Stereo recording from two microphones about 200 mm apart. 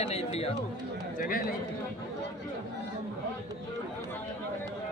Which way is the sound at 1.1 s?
45° left (ahead or behind).